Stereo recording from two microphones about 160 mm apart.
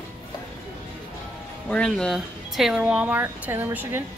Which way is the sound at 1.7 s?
5° left (ahead or behind).